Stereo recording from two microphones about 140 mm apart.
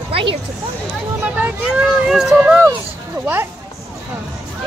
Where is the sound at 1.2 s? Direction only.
10° right (ahead or behind).